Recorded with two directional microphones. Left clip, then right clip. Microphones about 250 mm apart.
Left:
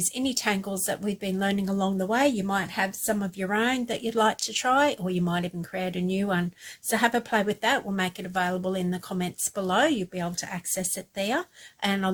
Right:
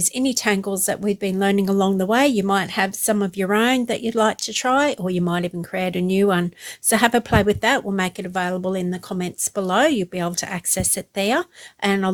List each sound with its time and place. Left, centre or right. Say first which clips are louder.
0.2 s speech: right 6 dB; right